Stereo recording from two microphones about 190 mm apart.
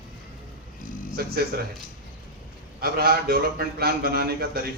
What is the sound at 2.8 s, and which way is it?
A man's voice, 55° right (ahead or behind).